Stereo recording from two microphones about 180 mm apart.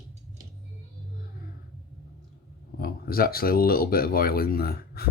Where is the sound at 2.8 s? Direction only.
55° left (ahead or behind).